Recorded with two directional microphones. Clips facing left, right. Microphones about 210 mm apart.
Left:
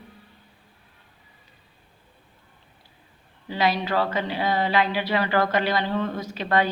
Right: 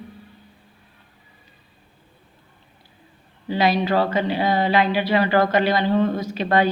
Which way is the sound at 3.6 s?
20° right (ahead or behind).